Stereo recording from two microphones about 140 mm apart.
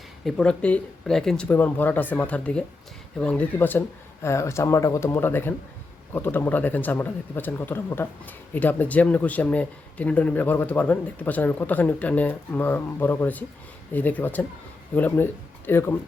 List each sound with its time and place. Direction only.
0.3 s speech: 5° left (ahead or behind)